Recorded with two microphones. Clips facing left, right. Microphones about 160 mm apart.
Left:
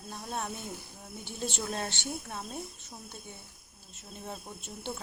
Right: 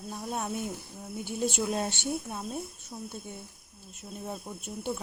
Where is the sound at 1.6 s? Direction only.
15° right (ahead or behind).